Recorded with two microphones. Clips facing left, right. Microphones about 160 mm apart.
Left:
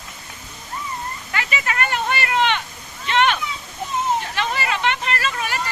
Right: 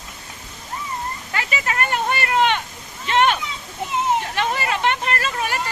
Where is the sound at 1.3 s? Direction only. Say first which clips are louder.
Even; 35° right (ahead or behind).